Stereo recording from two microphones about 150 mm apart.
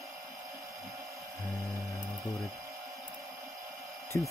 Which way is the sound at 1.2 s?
20° right (ahead or behind).